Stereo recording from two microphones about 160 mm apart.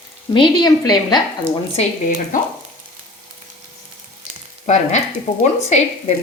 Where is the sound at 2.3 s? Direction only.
55° left (ahead or behind).